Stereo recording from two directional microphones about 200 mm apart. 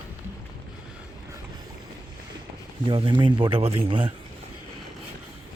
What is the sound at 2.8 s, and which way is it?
Speech, 25° right (ahead or behind).